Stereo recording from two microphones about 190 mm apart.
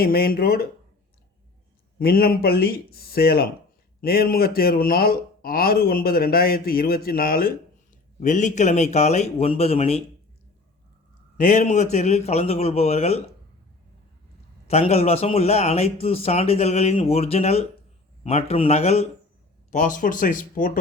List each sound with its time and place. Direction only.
0.0 s speech: 55° left (ahead or behind)
2.0 s speech: 55° left (ahead or behind)
8.2 s speech: 40° left (ahead or behind)
11.3 s speech: 40° left (ahead or behind)
14.7 s speech: 35° left (ahead or behind)